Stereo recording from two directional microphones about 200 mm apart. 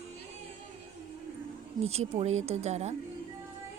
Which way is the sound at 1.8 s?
30° right (ahead or behind).